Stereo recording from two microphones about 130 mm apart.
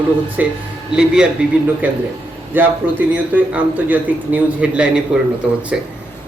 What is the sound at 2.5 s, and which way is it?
A man's voice, 15° right (ahead or behind).